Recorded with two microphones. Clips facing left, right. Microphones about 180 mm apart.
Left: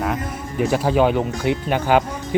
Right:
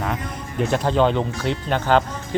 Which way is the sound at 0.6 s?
10° left (ahead or behind).